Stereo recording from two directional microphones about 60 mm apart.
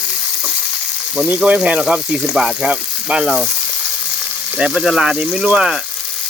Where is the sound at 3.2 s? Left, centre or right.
Centre.